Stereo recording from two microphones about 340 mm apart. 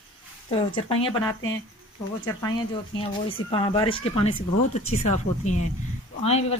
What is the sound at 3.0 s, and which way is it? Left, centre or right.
Speech, centre.